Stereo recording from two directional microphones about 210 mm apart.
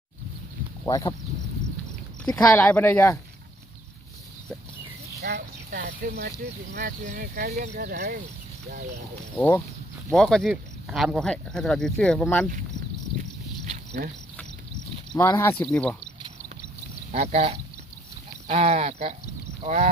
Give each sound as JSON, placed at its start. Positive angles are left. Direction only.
{"t": 0.9, "sound": "speech", "side_deg": 15}
{"t": 2.2, "sound": "speech", "side_deg": 5}
{"t": 5.2, "sound": "speech", "side_deg": -45}
{"t": 9.3, "sound": "speech", "side_deg": 10}
{"t": 13.7, "sound": "a sound", "side_deg": -35}
{"t": 15.3, "sound": "speech", "side_deg": 10}
{"t": 17.1, "sound": "speech", "side_deg": -30}